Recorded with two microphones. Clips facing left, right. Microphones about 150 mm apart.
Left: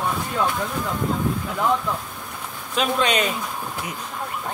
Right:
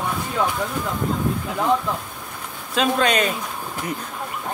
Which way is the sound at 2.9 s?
45° right (ahead or behind).